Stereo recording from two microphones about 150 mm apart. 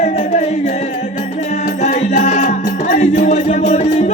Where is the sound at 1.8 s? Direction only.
50° left (ahead or behind).